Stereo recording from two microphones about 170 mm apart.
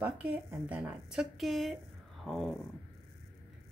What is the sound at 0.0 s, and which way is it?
Speech, 10° right (ahead or behind).